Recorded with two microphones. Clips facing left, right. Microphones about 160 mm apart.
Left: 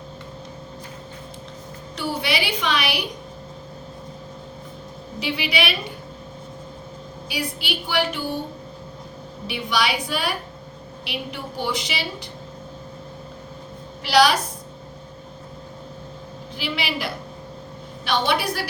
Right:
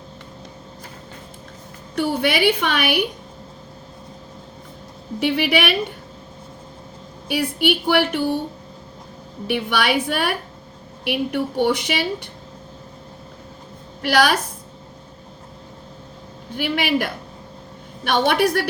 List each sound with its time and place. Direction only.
2.0 s a woman's voice: 55° right (ahead or behind)
5.2 s a woman's voice: 55° right (ahead or behind)
7.3 s a woman's voice: 55° right (ahead or behind)
9.5 s a woman's voice: 55° right (ahead or behind)
14.0 s a woman's voice: 55° right (ahead or behind)
16.6 s a woman's voice: 55° right (ahead or behind)